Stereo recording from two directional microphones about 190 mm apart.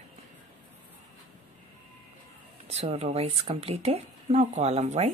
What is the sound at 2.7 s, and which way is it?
Speech, 35° right (ahead or behind).